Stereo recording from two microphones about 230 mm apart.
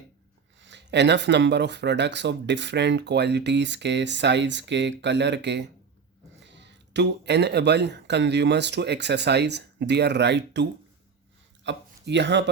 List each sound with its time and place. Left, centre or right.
0.6 s speech: right